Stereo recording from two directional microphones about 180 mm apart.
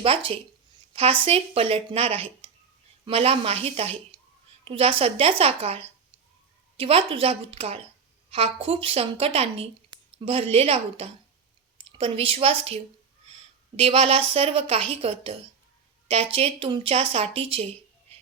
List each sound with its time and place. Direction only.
0.0 s a woman's voice: 30° right (ahead or behind)